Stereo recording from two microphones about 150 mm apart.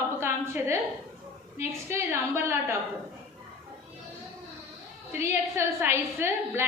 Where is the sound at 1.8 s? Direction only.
15° right (ahead or behind).